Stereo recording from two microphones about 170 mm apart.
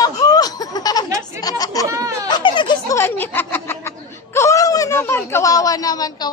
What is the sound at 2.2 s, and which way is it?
Baby laughter, 25° left (ahead or behind).